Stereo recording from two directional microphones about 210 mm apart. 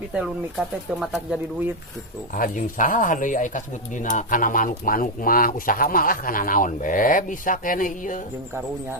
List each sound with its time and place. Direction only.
0.9 s speech: 5° right (ahead or behind)
2.3 s speech: 40° left (ahead or behind)